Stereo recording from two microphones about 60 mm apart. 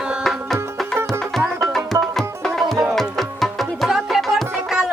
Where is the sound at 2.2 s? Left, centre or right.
Centre.